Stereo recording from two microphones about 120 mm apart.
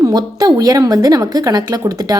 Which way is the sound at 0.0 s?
30° right (ahead or behind).